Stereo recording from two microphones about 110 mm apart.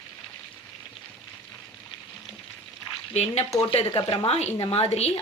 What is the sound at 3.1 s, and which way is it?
Speech, 80° left.